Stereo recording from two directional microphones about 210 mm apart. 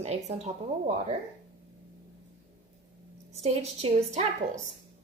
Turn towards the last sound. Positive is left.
turn(degrees=-30)  # may be behind; listen again after turning